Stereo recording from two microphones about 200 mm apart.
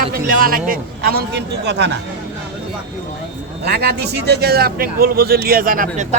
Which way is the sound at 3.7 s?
55° right (ahead or behind).